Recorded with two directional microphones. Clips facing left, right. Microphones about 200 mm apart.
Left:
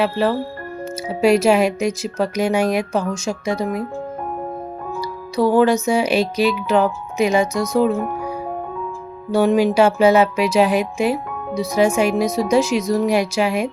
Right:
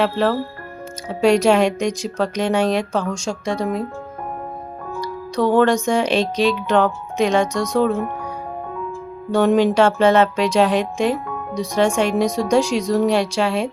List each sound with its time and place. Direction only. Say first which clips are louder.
0.0 s speech: even; 5° left (ahead or behind)
4.9 s speech: left 1 dB; 5° left (ahead or behind)
9.3 s speech: even; 5° left (ahead or behind)